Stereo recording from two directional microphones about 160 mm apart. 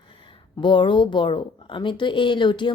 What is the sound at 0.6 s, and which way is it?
A woman's voice, 30° left (ahead or behind).